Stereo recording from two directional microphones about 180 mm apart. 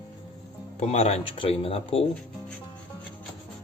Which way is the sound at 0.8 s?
35° left (ahead or behind).